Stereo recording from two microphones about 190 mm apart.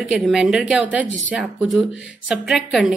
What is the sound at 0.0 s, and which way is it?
Speech, centre (ahead or behind).